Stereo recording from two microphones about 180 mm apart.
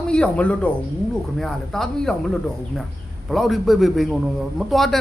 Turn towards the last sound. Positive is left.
turn(degrees=0)  # may be behind; listen again after turning